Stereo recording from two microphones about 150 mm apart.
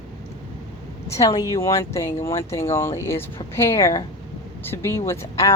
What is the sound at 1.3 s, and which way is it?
Speech, 25° left (ahead or behind).